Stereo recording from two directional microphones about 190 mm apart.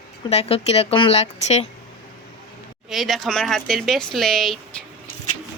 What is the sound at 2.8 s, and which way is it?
Speech, centre (ahead or behind).